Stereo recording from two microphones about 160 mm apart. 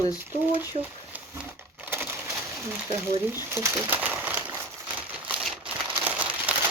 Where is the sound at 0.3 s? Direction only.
15° right (ahead or behind).